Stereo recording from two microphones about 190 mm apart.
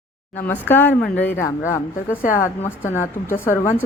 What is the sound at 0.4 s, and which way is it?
A woman's voice, 10° left (ahead or behind).